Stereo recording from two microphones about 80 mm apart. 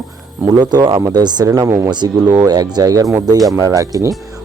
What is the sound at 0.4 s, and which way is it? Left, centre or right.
Speech, right.